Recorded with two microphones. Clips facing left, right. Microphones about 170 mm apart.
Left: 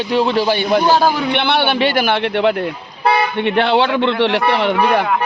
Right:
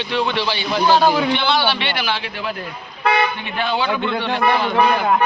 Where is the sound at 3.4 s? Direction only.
70° left (ahead or behind).